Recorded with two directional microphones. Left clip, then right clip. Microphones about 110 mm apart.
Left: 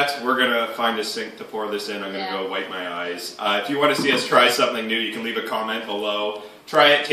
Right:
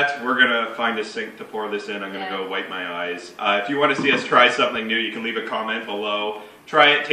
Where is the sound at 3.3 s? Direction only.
35° left (ahead or behind).